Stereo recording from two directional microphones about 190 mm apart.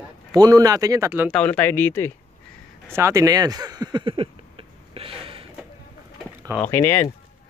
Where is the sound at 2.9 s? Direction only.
15° right (ahead or behind).